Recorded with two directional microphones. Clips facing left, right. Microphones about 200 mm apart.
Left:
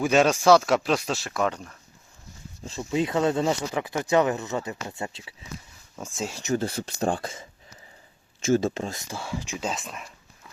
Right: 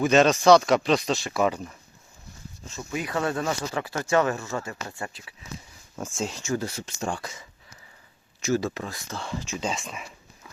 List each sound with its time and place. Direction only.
0.0 s speech: 10° left (ahead or behind); by 1.7 s 5° right (ahead or behind)
2.6 s speech: 30° left (ahead or behind)
6.1 s speech: 5° left (ahead or behind)
6.4 s speech: 25° left (ahead or behind)
9.0 s speech: 10° left (ahead or behind)
9.6 s speech: centre (ahead or behind)